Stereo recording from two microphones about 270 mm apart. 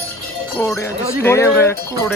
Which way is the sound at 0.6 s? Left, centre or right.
Centre.